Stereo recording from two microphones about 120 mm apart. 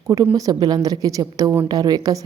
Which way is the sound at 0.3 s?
30° right (ahead or behind).